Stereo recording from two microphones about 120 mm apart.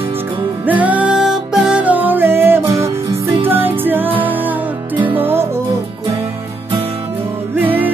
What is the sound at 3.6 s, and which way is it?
Music, 15° right (ahead or behind).